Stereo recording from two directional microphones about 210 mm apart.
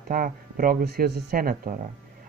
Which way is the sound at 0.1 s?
45° right (ahead or behind).